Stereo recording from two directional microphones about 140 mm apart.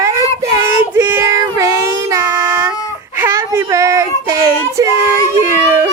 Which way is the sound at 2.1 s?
20° right (ahead or behind).